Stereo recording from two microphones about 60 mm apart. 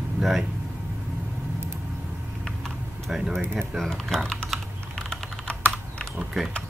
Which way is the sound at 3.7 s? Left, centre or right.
Centre.